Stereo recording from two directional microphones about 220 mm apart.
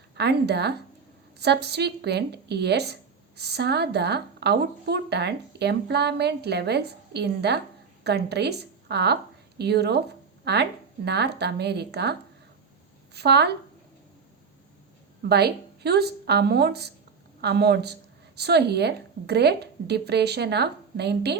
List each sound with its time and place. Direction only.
0.2 s a woman's voice: 50° right (ahead or behind)
13.1 s a woman's voice: 50° right (ahead or behind)
15.2 s a woman's voice: 45° right (ahead or behind)